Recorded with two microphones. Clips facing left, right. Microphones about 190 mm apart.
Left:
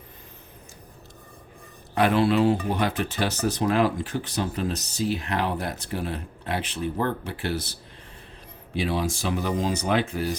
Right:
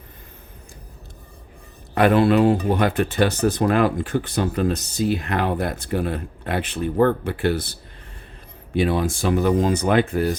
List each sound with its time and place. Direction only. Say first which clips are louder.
2.0 s speech: right 5 dB; 55° right (ahead or behind)
8.7 s speech: right 6 dB; 55° right (ahead or behind)